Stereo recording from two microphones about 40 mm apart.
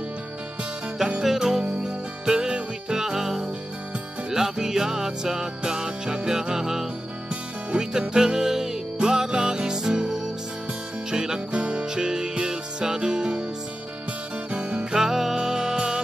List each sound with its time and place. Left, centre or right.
1.2 s music: centre
1.8 s music: right
7.7 s music: right
14.5 s music: right
15.0 s music: centre